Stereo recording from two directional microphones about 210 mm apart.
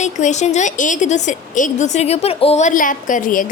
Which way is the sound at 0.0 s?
35° left (ahead or behind).